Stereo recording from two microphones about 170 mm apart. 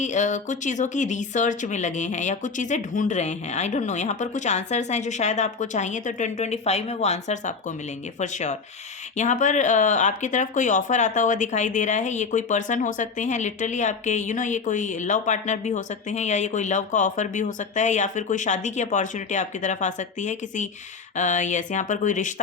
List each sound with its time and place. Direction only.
0.0 s speech: 45° left (ahead or behind)